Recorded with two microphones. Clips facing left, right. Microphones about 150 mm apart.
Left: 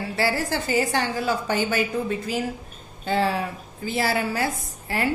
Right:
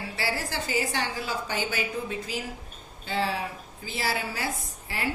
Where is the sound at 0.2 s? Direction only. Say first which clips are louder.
Left 7 dB; 50° left (ahead or behind).